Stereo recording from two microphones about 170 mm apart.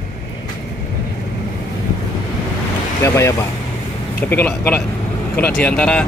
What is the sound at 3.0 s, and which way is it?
A man's voice, 15° left (ahead or behind).